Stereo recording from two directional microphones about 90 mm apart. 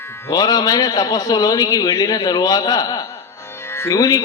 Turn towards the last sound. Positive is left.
turn(degrees=40)  # may be behind; listen again after turning